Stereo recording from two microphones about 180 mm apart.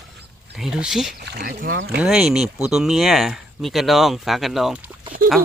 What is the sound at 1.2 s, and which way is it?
Speech, 60° right (ahead or behind).